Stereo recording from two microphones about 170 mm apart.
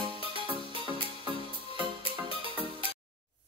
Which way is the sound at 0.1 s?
30° right (ahead or behind).